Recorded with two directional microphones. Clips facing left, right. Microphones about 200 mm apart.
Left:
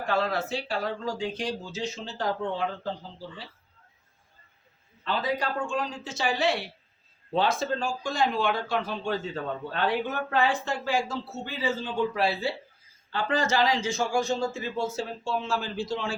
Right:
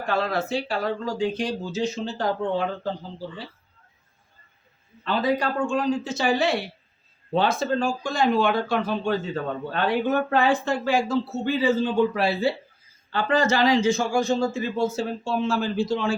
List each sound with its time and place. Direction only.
0.2 s speech: 60° right (ahead or behind); by 2.9 s 45° right (ahead or behind)
5.0 s speech: 60° right (ahead or behind)